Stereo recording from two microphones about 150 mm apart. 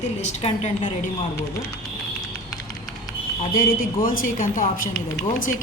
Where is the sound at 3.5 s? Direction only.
70° left (ahead or behind).